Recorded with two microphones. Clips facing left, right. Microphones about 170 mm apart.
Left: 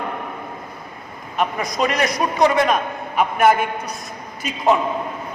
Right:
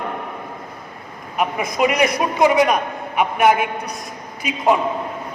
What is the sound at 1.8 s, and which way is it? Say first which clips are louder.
A man's voice: right 3 dB; 15° right (ahead or behind).